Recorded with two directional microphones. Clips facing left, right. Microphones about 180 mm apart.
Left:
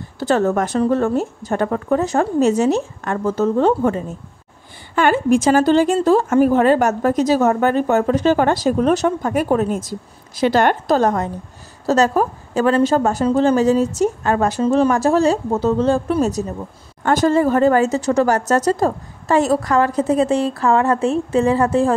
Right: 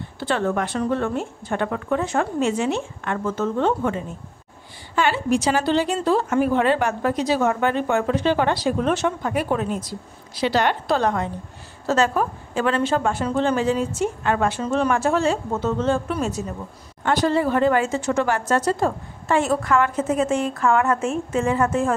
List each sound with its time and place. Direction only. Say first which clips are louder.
0.2 s speech: left 6 dB; 40° left (ahead or behind)
4.9 s a woman's voice: left 6 dB; 50° left (ahead or behind); by 21.9 s 35° left (ahead or behind)